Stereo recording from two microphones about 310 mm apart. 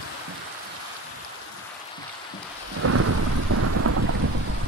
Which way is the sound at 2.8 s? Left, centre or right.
Right.